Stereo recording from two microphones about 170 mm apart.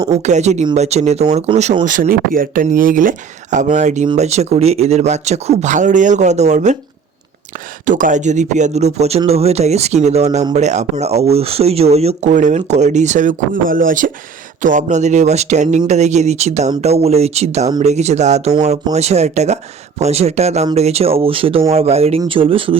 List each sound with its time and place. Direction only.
0.1 s speech: 40° right (ahead or behind)
1.8 s speech: 50° right (ahead or behind)
7.9 s speech: 50° right (ahead or behind); by 22.8 s 30° right (ahead or behind)